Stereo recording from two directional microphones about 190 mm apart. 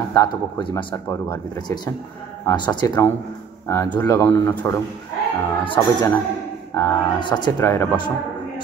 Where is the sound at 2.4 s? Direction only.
25° left (ahead or behind).